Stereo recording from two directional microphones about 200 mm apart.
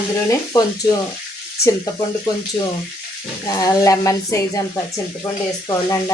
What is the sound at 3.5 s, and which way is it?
Speech, 15° left (ahead or behind).